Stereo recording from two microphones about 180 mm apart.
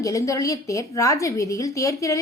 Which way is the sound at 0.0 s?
15° left (ahead or behind).